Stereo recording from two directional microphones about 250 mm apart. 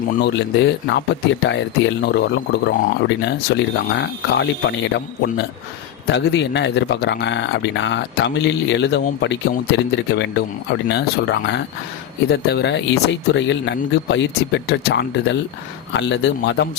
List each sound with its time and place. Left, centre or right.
0.2 s speech: left